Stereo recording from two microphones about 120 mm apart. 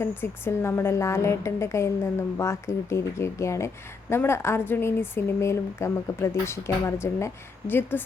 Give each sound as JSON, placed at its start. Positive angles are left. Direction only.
{"t": 0.0, "sound": "a woman's voice", "side_deg": 20}